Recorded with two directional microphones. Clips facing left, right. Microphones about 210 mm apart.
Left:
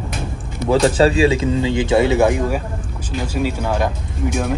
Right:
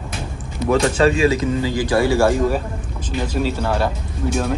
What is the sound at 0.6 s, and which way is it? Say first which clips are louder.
A man's voice: left 2 dB; 35° left (ahead or behind).